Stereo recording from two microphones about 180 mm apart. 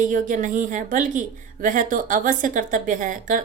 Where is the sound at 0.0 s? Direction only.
45° right (ahead or behind).